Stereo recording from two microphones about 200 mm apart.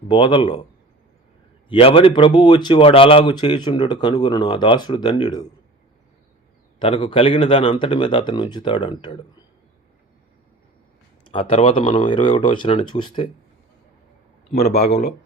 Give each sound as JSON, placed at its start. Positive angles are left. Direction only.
{"t": 0.1, "sound": "speech", "side_deg": 25}
{"t": 1.7, "sound": "speech", "side_deg": 25}
{"t": 6.7, "sound": "speech", "side_deg": 25}
{"t": 11.3, "sound": "speech", "side_deg": 30}